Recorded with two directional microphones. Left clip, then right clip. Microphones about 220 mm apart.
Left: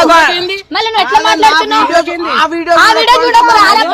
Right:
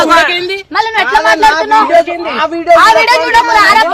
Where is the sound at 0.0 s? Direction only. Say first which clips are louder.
Left 1 dB; 50° left (ahead or behind).